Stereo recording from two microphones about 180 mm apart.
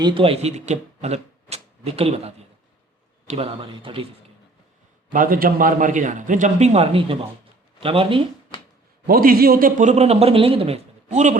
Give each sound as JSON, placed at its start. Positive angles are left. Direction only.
{"t": 0.0, "sound": "a man's voice", "side_deg": -30}
{"t": 5.1, "sound": "a man's voice", "side_deg": -50}
{"t": 9.0, "sound": "a man's voice", "side_deg": -55}